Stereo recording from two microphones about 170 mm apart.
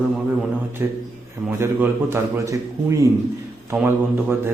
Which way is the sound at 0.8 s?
10° right (ahead or behind).